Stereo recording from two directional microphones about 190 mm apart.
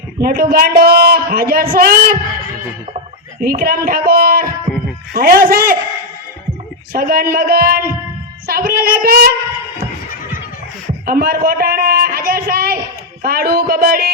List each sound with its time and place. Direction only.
0.2 s a man's voice: 50° right (ahead or behind)
3.4 s a man's voice: 50° right (ahead or behind)
6.9 s a man's voice: 50° right (ahead or behind)
11.0 s a man's voice: 50° right (ahead or behind)